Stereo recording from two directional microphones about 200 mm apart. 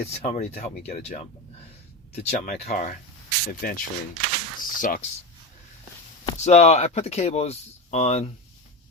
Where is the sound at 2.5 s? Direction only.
35° left (ahead or behind).